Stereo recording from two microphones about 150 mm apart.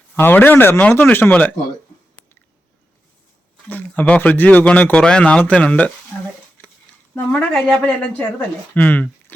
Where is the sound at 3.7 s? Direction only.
10° left (ahead or behind).